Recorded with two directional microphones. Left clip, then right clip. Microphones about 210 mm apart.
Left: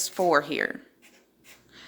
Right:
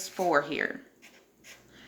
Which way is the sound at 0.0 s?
50° left (ahead or behind).